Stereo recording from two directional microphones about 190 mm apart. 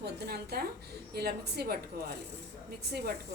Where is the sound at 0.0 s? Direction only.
55° right (ahead or behind).